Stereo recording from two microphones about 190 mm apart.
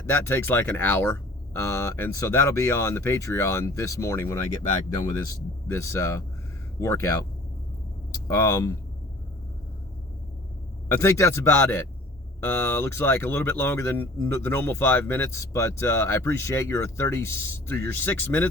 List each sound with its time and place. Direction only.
0.1 s speech: 10° left (ahead or behind)
10.8 s speech: 15° left (ahead or behind)